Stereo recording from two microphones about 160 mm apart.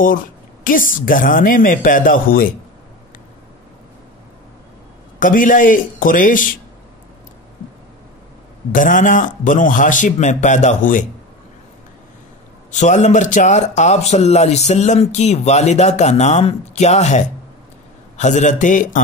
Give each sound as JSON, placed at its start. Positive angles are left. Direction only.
{"t": 0.7, "sound": "speech", "side_deg": 60}
{"t": 5.2, "sound": "speech", "side_deg": 55}
{"t": 8.7, "sound": "a man's voice", "side_deg": 55}
{"t": 12.7, "sound": "a man's voice", "side_deg": 50}